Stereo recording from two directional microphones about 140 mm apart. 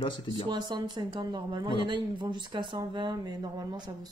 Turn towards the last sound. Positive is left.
turn(degrees=-30)  # may be behind; listen again after turning